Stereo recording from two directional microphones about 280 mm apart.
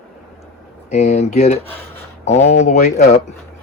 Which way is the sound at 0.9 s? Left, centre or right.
Left.